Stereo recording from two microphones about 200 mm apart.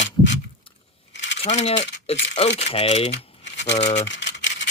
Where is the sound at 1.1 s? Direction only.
65° left (ahead or behind).